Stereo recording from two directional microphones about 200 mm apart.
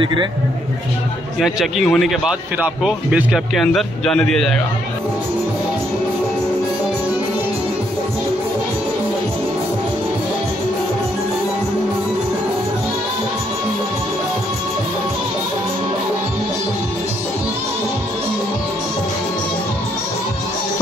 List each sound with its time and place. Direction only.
0.0 s speech: 25° right (ahead or behind)
1.4 s speech: centre (ahead or behind)